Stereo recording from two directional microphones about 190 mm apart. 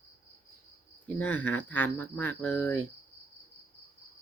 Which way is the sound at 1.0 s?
10° left (ahead or behind).